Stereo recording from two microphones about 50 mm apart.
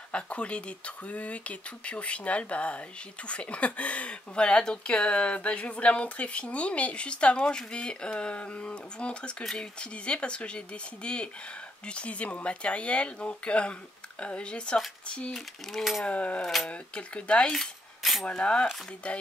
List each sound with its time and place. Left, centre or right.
0.1 s speech: left
17.5 s coin: centre
18.2 s speech: left